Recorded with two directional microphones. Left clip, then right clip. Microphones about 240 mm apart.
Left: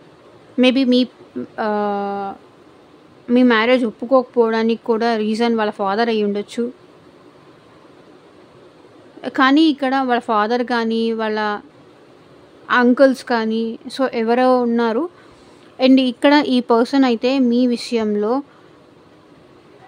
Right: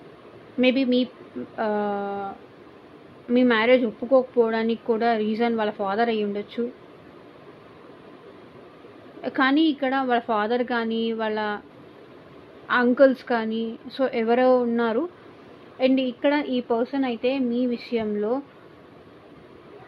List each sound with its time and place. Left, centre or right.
0.6 s speech: left
9.2 s speech: left
12.6 s speech: left
15.8 s a woman's voice: left